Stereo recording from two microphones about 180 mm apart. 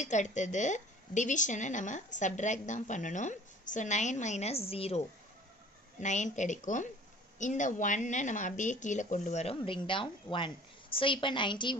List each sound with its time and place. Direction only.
0.0 s a woman's voice: 40° left (ahead or behind); by 11.7 s 25° left (ahead or behind)